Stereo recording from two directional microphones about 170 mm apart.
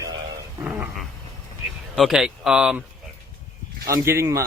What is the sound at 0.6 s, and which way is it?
Speech, 10° right (ahead or behind).